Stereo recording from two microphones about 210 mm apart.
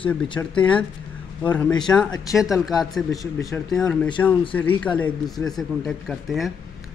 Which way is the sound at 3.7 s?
5° left (ahead or behind).